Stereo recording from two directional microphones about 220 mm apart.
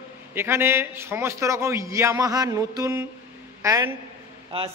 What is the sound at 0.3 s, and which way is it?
A man's voice, 10° right (ahead or behind).